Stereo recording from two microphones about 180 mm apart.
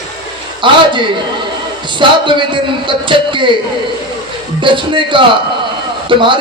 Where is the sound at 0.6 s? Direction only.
25° right (ahead or behind).